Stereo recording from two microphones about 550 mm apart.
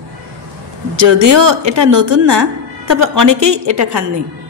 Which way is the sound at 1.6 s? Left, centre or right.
Right.